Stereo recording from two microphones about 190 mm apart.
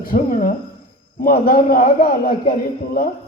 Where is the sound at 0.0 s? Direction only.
45° left (ahead or behind).